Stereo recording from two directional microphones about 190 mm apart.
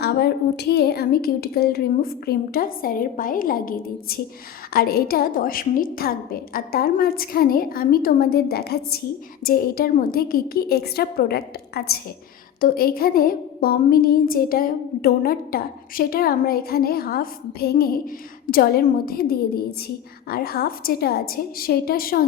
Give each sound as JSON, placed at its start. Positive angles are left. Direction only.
{"t": 0.0, "sound": "a woman's voice", "side_deg": 60}